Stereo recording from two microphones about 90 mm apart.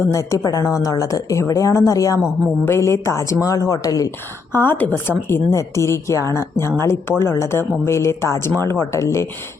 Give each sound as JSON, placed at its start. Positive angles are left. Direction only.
{"t": 0.0, "sound": "speech", "side_deg": 35}
{"t": 4.5, "sound": "speech", "side_deg": 25}